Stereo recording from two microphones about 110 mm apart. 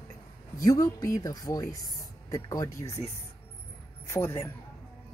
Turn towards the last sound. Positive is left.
turn(degrees=25)  # may be behind; listen again after turning